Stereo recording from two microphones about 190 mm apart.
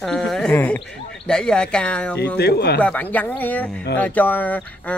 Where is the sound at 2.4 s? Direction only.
60° left (ahead or behind).